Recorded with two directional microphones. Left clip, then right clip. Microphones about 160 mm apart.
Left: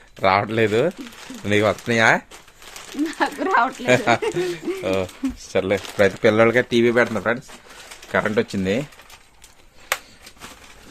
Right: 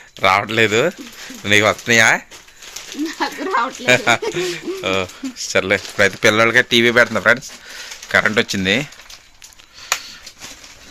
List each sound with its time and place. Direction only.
0.2 s speech: 10° left (ahead or behind)
3.4 s a sound: 20° left (ahead or behind)
3.8 s speech: 5° left (ahead or behind)